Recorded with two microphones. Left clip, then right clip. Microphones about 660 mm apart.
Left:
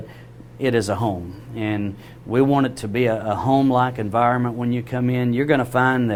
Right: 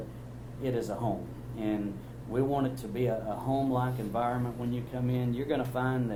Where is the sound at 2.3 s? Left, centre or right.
Left.